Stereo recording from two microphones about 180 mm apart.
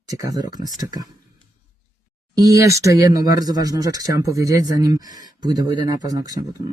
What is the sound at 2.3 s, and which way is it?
Speech, 20° right (ahead or behind).